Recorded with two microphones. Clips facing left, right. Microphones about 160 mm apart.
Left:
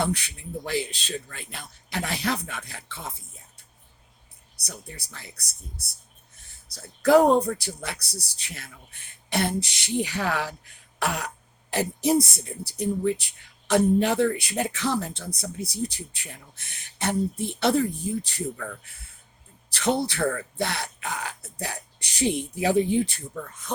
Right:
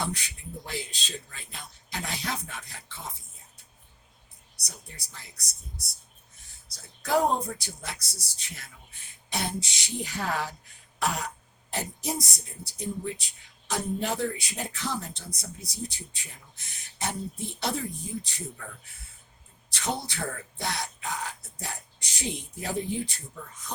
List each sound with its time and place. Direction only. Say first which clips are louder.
0.0 s speech: left 6 dB; 70° left (ahead or behind)
4.6 s speech: left 7 dB; 65° left (ahead or behind)
6.7 s speech: left 8 dB; 65° left (ahead or behind)
19.7 s speech: left 8 dB; 65° left (ahead or behind)